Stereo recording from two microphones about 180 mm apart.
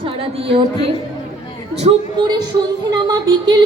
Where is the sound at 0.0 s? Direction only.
30° right (ahead or behind).